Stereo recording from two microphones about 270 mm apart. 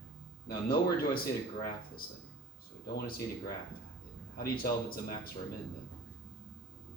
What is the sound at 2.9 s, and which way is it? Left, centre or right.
Speech, left.